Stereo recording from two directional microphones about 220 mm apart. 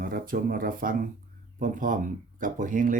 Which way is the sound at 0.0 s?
40° right (ahead or behind).